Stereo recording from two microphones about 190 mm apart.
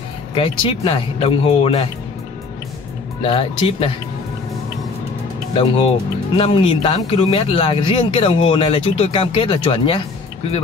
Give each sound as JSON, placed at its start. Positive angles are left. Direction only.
{"t": 0.3, "sound": "speech", "side_deg": 30}
{"t": 3.2, "sound": "speech", "side_deg": 30}
{"t": 5.6, "sound": "speech", "side_deg": 30}